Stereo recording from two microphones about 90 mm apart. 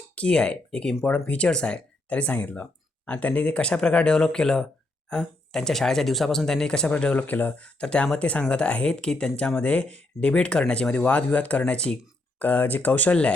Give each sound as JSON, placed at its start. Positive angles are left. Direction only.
{"t": 0.2, "sound": "speech", "side_deg": 10}